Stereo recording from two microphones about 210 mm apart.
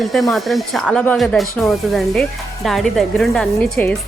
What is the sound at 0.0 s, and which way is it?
Speech, centre (ahead or behind).